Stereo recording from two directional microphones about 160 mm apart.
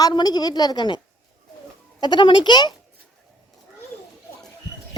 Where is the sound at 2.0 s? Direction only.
30° left (ahead or behind).